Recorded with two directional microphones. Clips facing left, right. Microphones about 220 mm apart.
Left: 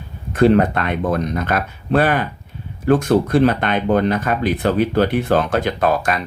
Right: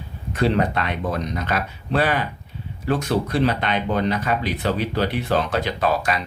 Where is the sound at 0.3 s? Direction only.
50° left (ahead or behind).